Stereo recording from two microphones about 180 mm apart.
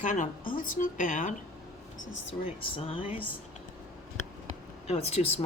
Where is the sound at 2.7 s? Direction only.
30° left (ahead or behind).